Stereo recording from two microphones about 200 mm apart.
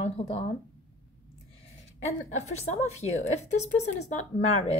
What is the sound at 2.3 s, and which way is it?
A woman's voice, 35° left (ahead or behind).